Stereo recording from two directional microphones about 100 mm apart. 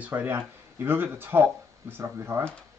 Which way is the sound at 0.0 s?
20° right (ahead or behind).